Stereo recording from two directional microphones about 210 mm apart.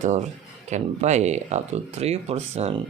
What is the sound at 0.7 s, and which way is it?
Speech, 35° right (ahead or behind).